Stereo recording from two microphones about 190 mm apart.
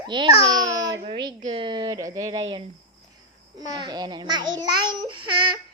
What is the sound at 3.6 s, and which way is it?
Speech, 20° right (ahead or behind).